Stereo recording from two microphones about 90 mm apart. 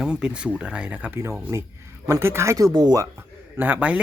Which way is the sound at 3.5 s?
20° right (ahead or behind).